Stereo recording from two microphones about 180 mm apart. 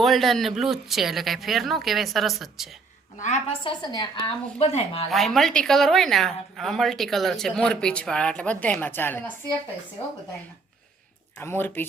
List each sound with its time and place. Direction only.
0.0 s a woman's voice: centre (ahead or behind)
3.2 s speech: 40° left (ahead or behind)
3.6 s a woman's voice: 25° left (ahead or behind)
5.1 s a woman's voice: centre (ahead or behind)
11.3 s speech: 15° left (ahead or behind)